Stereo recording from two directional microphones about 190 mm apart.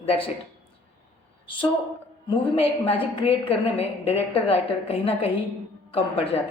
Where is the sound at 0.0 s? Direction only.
30° left (ahead or behind).